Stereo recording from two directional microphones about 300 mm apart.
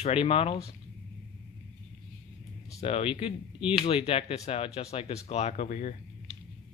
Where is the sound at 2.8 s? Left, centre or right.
Centre.